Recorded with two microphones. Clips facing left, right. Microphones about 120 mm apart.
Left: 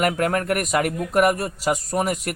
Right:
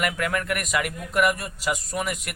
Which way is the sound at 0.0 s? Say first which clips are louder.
Left 5 dB; 40° left (ahead or behind).